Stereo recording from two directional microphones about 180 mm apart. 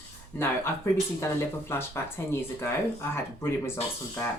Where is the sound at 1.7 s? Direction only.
15° left (ahead or behind).